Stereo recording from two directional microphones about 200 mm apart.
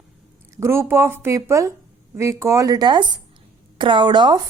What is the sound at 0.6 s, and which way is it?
A woman's voice, 15° right (ahead or behind).